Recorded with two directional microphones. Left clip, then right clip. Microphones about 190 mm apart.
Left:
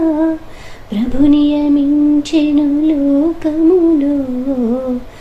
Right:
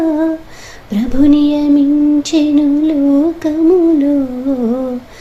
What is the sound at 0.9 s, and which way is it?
Child singing, 45° right (ahead or behind).